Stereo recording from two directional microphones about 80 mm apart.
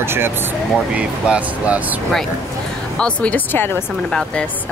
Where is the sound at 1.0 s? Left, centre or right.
Centre.